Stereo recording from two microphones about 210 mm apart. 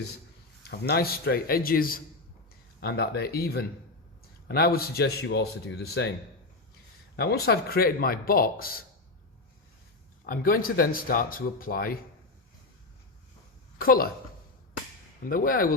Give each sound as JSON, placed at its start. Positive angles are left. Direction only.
{"t": 0.7, "sound": "speech", "side_deg": 50}
{"t": 7.2, "sound": "speech", "side_deg": 50}
{"t": 10.2, "sound": "speech", "side_deg": 45}
{"t": 13.7, "sound": "a woman's voice", "side_deg": 45}
{"t": 15.3, "sound": "speech", "side_deg": 45}